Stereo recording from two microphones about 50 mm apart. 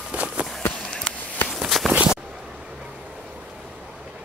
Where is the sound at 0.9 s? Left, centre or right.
Centre.